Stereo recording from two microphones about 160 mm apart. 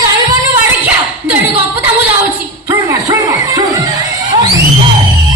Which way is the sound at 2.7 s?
20° right (ahead or behind).